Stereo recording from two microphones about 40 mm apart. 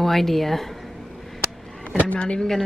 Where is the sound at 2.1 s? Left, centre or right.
Left.